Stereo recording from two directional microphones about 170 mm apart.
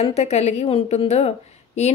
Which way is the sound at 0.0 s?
40° left (ahead or behind).